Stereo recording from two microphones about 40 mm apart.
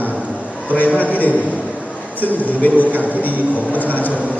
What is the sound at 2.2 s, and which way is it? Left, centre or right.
A man's voice, left.